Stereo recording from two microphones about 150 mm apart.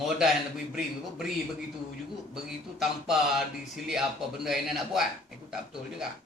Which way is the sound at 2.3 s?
5° right (ahead or behind).